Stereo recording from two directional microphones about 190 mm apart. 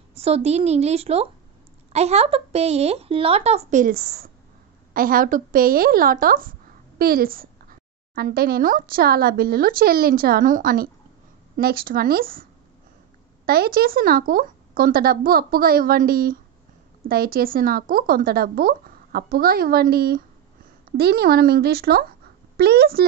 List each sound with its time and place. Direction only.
0.1 s a woman's voice: 35° right (ahead or behind); by 12.4 s 50° right (ahead or behind)
13.5 s a woman's voice: 55° right (ahead or behind)